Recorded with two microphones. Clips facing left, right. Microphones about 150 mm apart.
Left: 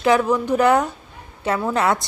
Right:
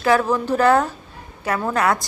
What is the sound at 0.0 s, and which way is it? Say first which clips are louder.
A woman's voice: left 1 dB; 15° left (ahead or behind).